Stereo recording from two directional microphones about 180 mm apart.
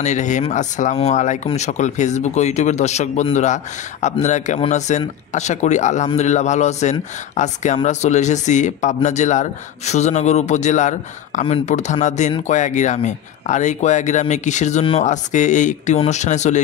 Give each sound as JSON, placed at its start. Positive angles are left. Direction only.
{"t": 0.0, "sound": "speech", "side_deg": 40}